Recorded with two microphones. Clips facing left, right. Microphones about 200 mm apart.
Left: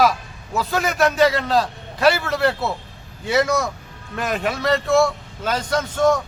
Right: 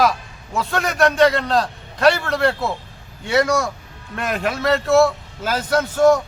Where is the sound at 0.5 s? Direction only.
Centre (ahead or behind).